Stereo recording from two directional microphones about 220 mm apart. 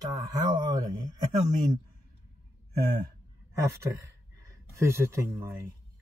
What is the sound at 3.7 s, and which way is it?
Speech, 15° right (ahead or behind).